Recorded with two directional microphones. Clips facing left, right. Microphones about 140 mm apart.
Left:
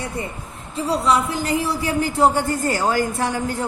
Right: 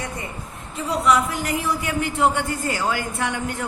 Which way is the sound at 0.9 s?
30° left (ahead or behind).